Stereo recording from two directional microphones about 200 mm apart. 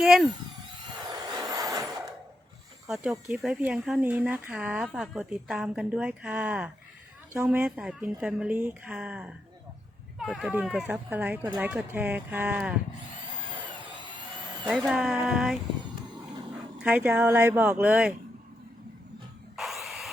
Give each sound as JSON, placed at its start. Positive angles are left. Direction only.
{"t": 0.0, "sound": "speech", "side_deg": -5}
{"t": 1.3, "sound": "vehicle", "side_deg": -15}
{"t": 2.8, "sound": "speech", "side_deg": 0}
{"t": 13.7, "sound": "drill", "side_deg": -25}
{"t": 14.7, "sound": "speech", "side_deg": -5}
{"t": 16.7, "sound": "speech", "side_deg": -5}
{"t": 19.5, "sound": "tools", "side_deg": 0}